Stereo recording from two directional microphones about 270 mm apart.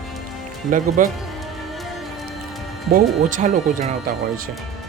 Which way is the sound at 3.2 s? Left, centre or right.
Right.